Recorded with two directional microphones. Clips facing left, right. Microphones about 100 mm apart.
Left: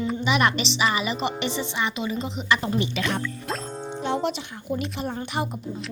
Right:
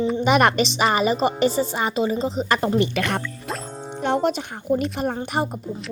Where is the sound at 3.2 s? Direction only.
Centre (ahead or behind).